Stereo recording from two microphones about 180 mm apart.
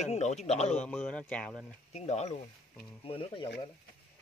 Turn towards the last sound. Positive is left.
turn(degrees=30)  # may be behind; listen again after turning